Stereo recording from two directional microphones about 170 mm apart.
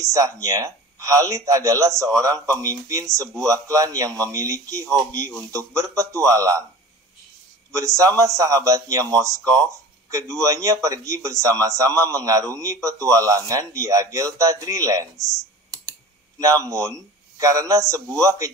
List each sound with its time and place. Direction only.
0.0 s a man's voice: 20° right (ahead or behind)
7.7 s a man's voice: 20° right (ahead or behind)
16.3 s a man's voice: 20° right (ahead or behind)